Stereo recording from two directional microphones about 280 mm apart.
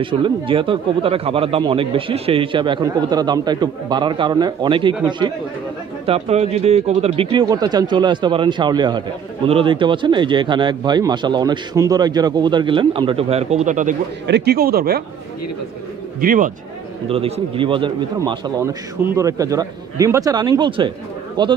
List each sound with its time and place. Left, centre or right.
0.0 s speech: centre
6.0 s speech: right
14.2 s speech: right
16.2 s speech: right
17.1 s speech: centre